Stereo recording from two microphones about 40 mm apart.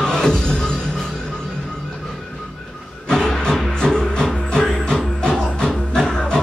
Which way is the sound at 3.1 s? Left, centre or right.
Centre.